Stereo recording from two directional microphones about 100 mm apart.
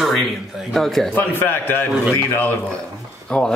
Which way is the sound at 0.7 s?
5° left (ahead or behind).